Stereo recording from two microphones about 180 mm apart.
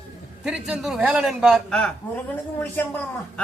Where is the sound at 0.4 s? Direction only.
5° right (ahead or behind).